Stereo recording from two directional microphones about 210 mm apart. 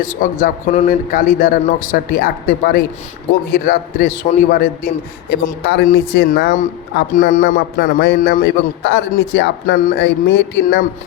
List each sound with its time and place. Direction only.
0.0 s a man's voice: 40° left (ahead or behind)
5.6 s a man's voice: 55° left (ahead or behind)
7.8 s a man's voice: 55° left (ahead or behind)